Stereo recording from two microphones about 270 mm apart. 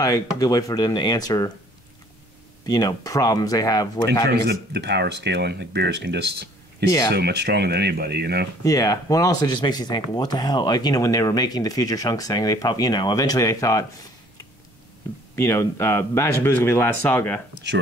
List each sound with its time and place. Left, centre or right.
0.0 s speech: centre
2.6 s speech: centre
4.3 s speech: right
8.6 s speech: centre
15.3 s speech: centre